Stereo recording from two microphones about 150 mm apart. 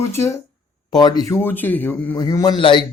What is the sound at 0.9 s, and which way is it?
Speech, 30° left (ahead or behind).